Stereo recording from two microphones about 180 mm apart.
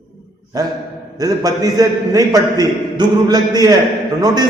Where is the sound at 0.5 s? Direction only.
20° right (ahead or behind).